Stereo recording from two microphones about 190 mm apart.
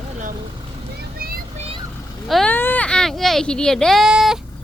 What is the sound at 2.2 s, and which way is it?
Speech, centre (ahead or behind).